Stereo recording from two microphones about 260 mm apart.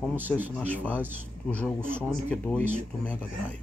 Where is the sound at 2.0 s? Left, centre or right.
Centre.